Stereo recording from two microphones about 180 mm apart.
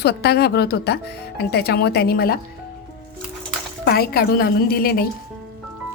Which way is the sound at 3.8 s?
60° left (ahead or behind).